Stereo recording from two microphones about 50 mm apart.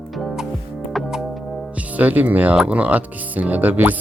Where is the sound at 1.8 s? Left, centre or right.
Right.